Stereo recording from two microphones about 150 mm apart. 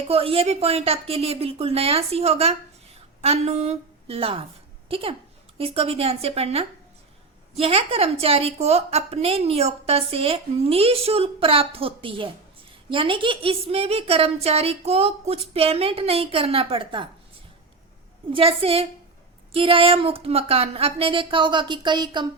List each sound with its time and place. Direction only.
0.1 s a woman's voice: 40° right (ahead or behind)
18.3 s a woman's voice: 35° right (ahead or behind)